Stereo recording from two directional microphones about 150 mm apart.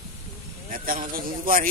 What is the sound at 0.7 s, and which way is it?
Speech, 70° right (ahead or behind).